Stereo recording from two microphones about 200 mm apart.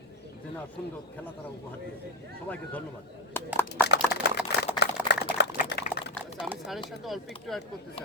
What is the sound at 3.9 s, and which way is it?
Typing, 55° left (ahead or behind).